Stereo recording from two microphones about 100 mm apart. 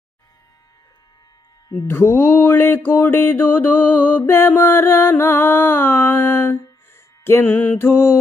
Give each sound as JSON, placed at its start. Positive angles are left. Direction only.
{"t": 1.9, "sound": "mantra", "side_deg": 20}